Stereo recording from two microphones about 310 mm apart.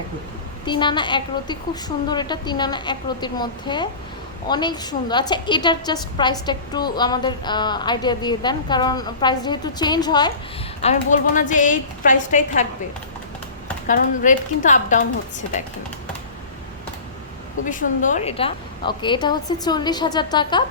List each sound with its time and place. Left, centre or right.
0.6 s a woman's voice: centre
13.8 s a woman's voice: left
17.7 s a woman's voice: left